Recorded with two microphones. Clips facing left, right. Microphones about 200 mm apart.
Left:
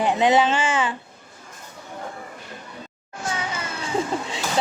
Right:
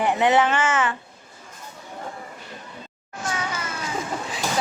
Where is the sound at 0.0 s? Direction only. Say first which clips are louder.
Left 1 dB; 15° left (ahead or behind).